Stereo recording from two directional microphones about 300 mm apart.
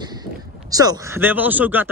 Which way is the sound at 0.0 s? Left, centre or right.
Centre.